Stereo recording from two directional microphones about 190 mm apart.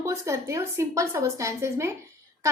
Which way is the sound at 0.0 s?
15° right (ahead or behind).